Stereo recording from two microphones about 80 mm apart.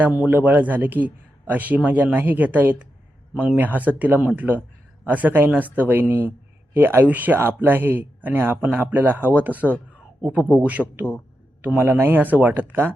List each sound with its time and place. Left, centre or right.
0.3 s a man's voice: right